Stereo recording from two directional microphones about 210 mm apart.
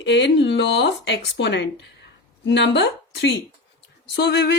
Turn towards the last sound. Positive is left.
turn(degrees=50)  # may be behind; listen again after turning